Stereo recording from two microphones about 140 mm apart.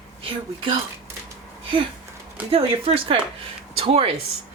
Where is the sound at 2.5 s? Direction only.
40° right (ahead or behind).